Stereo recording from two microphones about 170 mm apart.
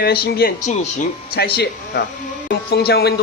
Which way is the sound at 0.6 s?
40° left (ahead or behind).